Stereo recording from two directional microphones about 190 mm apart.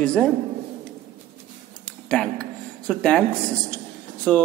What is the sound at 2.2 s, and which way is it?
A man's voice, 5° left (ahead or behind).